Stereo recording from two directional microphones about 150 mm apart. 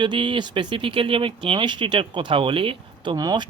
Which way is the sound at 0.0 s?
35° right (ahead or behind).